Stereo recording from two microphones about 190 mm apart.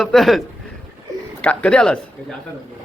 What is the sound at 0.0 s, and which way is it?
A man's voice, centre (ahead or behind).